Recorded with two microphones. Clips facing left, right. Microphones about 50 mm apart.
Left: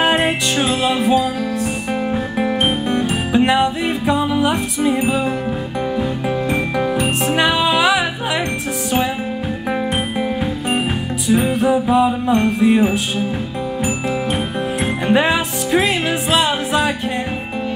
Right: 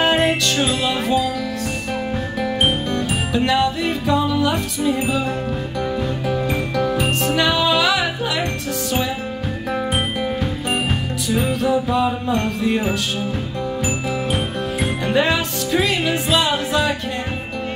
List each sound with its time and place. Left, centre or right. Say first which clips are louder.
0.2 s music: left 1 dB; centre
2.9 s music: left 4 dB; left
11.2 s music: left 4 dB; left
12.4 s chime: left 6 dB; centre
14.3 s music: left 2 dB; centre
15.1 s music: even; left